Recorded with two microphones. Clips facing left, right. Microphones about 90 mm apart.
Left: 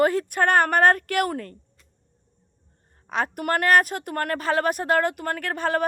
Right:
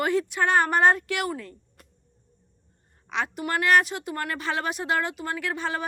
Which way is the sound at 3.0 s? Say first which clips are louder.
Left 3 dB; 45° left (ahead or behind).